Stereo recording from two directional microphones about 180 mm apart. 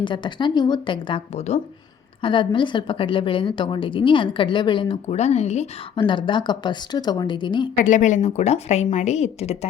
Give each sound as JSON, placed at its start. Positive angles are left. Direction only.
{"t": 0.0, "sound": "a woman's voice", "side_deg": 25}
{"t": 7.8, "sound": "a woman's voice", "side_deg": 45}